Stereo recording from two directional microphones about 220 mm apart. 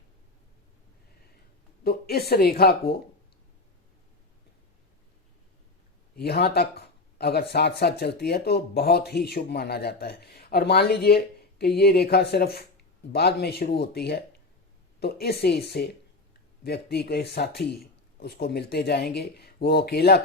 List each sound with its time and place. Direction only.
1.8 s speech: 45° left (ahead or behind)
6.1 s speech: 45° left (ahead or behind)